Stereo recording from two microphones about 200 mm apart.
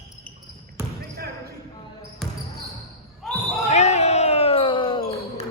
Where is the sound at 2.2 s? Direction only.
Centre (ahead or behind).